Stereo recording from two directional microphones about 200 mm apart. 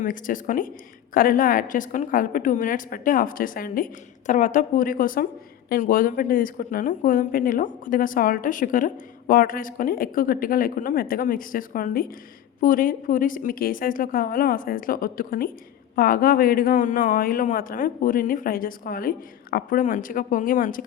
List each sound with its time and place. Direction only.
0.0 s speech: 40° left (ahead or behind)